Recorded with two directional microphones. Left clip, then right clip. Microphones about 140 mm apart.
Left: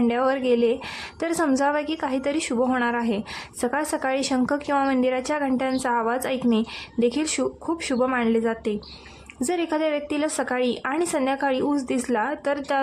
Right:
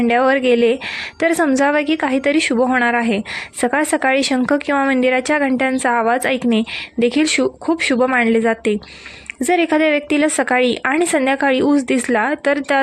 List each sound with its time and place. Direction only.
0.1 s a woman's voice: 30° right (ahead or behind)